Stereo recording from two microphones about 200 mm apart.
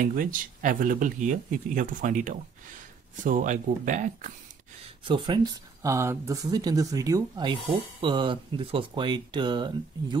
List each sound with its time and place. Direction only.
0.0 s speech: 45° right (ahead or behind)
5.0 s speech: 25° right (ahead or behind)